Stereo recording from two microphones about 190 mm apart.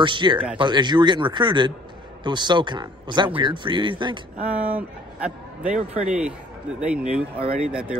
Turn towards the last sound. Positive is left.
turn(degrees=-5)  # may be behind; listen again after turning